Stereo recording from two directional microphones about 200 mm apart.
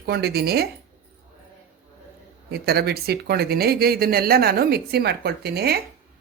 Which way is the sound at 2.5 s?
55° right (ahead or behind).